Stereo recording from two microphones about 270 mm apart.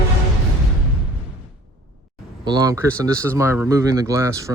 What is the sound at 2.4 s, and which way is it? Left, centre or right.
Speech, centre.